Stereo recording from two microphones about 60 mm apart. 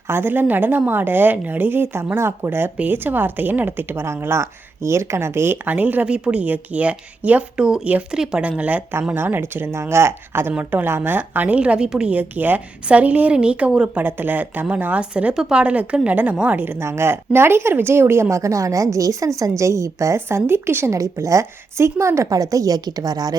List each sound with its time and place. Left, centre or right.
0.1 s speech: right
5.6 s a woman's voice: right
6.1 s a woman's voice: centre
9.1 s speech: right
10.6 s a woman's voice: right
10.8 s speech: right
11.2 s a woman's voice: right
12.1 s a woman's voice: right
14.0 s a woman's voice: right
16.7 s speech: right
19.4 s a woman's voice: right
20.1 s speech: right
20.9 s a woman's voice: right
22.3 s a woman's voice: right